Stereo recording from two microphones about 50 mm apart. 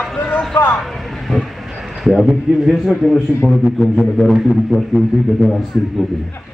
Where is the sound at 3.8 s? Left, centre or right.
Centre.